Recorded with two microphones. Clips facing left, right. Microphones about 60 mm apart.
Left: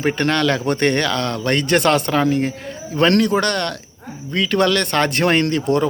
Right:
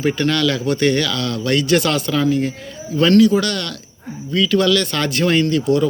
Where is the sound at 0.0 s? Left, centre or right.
Left.